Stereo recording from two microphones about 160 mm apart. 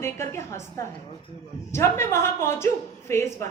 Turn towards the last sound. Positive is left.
turn(degrees=15)  # may be behind; listen again after turning